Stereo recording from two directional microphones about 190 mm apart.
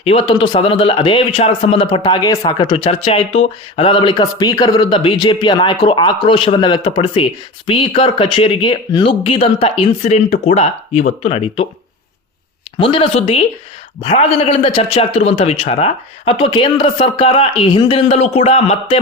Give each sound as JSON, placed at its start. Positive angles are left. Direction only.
{"t": 0.0, "sound": "a man's voice", "side_deg": 30}
{"t": 12.8, "sound": "a man's voice", "side_deg": 30}